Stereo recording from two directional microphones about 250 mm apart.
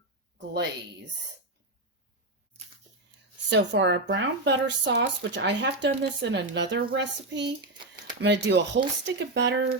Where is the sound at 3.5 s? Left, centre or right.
Right.